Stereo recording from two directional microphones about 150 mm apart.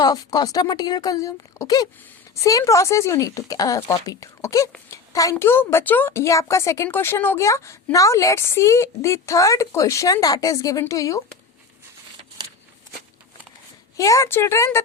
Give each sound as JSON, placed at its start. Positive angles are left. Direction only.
{"t": 0.0, "sound": "a woman's voice", "side_deg": 25}
{"t": 13.9, "sound": "a woman's voice", "side_deg": 20}